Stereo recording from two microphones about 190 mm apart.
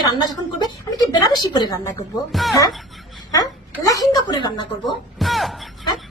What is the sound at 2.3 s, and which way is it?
Speech, centre (ahead or behind).